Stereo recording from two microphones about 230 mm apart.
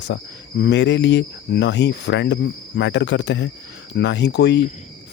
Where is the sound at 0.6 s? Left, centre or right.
Left.